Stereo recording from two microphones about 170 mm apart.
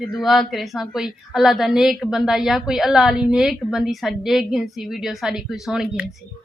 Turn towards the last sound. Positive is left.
turn(degrees=-5)  # may be behind; listen again after turning